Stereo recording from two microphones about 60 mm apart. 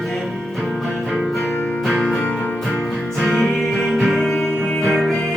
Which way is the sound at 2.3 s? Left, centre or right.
Left.